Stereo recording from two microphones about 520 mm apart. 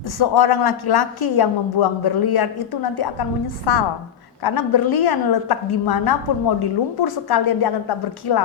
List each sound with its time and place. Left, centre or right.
0.2 s a woman's voice: left